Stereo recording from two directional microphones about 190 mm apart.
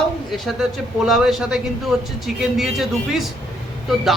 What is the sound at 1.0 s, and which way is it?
Speech, centre (ahead or behind).